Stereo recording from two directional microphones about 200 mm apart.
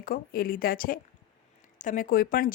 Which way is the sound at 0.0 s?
45° left (ahead or behind).